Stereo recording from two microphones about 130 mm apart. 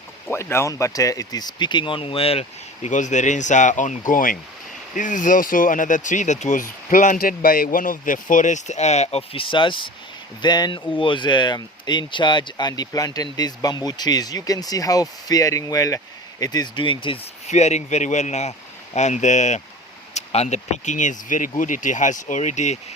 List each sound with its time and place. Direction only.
0.3 s speech: 20° left (ahead or behind); by 2.9 s 50° left (ahead or behind)
2.9 s speech: 70° left (ahead or behind); by 4.4 s 90° left
4.9 s speech: 80° left; by 17.2 s 40° left (ahead or behind)
17.4 s a man's voice: 60° left (ahead or behind)